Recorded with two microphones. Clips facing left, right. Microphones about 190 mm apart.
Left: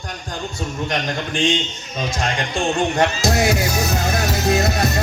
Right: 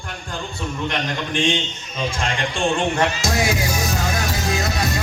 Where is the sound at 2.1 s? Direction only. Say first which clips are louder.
Left 3 dB; 40° left (ahead or behind).